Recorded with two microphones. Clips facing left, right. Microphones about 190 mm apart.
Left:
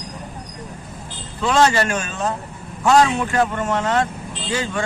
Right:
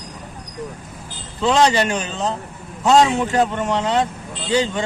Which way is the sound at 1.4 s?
20° right (ahead or behind).